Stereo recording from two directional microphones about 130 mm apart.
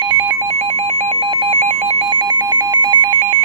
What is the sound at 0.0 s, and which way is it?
Telephone dialing, 35° right (ahead or behind).